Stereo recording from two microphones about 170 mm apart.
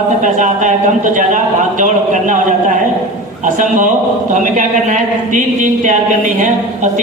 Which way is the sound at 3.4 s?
45° right (ahead or behind).